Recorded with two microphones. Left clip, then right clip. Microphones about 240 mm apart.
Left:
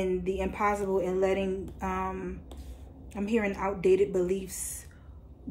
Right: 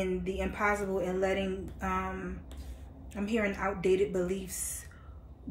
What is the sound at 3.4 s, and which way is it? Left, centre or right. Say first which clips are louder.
Speech: left 1 dB; centre.